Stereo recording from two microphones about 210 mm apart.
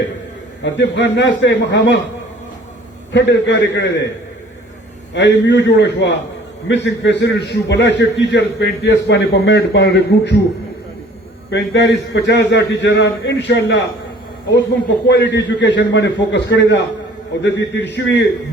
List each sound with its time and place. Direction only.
0.6 s a man's voice: 55° left (ahead or behind)
3.1 s a man's voice: 60° left (ahead or behind)
5.1 s a man's voice: 55° left (ahead or behind)
11.5 s a man's voice: 55° left (ahead or behind)
15.0 s a man's voice: 55° left (ahead or behind)